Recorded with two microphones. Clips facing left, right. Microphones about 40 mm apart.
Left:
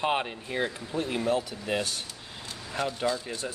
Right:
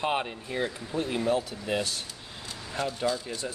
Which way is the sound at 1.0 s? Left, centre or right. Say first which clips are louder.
Even; centre.